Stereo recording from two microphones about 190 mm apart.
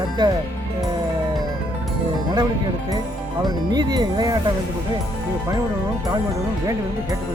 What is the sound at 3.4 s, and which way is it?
Speech, 20° right (ahead or behind).